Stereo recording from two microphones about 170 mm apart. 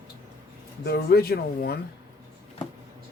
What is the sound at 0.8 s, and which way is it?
Speech, 65° left (ahead or behind).